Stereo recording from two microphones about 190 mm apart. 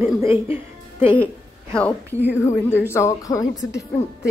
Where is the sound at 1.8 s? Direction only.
5° left (ahead or behind).